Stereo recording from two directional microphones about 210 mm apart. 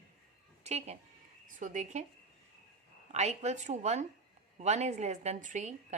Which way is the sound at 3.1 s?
35° right (ahead or behind).